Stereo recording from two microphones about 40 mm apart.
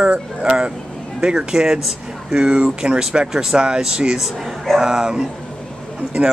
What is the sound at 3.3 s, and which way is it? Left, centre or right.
Speech, centre.